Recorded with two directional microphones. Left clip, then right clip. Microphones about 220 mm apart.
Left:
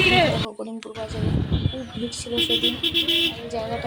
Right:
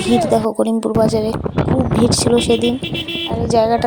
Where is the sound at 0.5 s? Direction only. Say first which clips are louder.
Right 17 dB; 45° right (ahead or behind).